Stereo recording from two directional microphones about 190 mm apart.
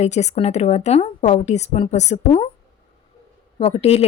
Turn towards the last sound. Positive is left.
turn(degrees=35)  # may be behind; listen again after turning